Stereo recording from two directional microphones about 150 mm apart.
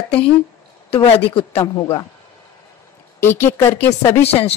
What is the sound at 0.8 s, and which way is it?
Speech, 40° left (ahead or behind).